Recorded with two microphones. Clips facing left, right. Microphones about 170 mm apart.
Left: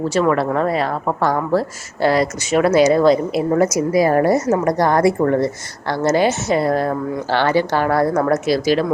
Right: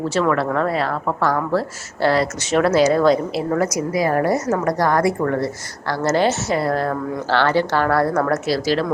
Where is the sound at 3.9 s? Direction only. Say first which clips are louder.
Left 4 dB; 30° left (ahead or behind).